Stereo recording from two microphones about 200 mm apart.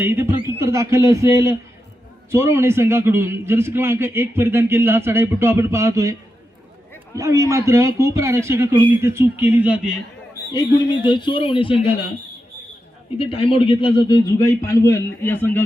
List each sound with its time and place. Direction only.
0.0 s a man's voice: 10° right (ahead or behind)
7.2 s a man's voice: 15° right (ahead or behind)
11.1 s a man's voice: 25° left (ahead or behind)
13.1 s a man's voice: 30° left (ahead or behind)
14.3 s a man's voice: 15° left (ahead or behind)